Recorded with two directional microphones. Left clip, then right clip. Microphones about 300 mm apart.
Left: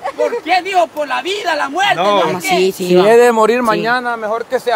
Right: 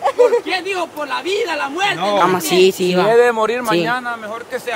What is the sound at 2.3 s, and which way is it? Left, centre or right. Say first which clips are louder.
Speech: right 1 dB; centre.